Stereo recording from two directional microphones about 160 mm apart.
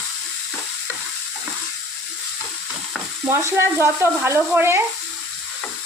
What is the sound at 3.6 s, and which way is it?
Frying, 15° right (ahead or behind).